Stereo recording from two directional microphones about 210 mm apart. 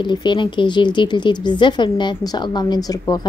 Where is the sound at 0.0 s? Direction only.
20° left (ahead or behind).